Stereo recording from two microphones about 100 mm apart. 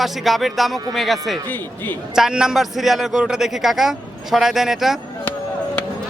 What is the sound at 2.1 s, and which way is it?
Speech, 5° right (ahead or behind).